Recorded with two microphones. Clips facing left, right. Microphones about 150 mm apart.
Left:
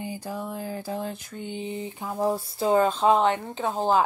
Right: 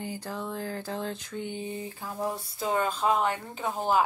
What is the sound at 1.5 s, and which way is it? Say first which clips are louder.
Speech: left 3 dB; 20° left (ahead or behind).